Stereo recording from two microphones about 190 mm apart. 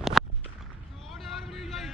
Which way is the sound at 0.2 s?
Centre (ahead or behind).